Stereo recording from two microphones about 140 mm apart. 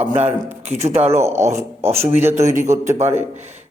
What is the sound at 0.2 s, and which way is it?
Speech, 50° right (ahead or behind).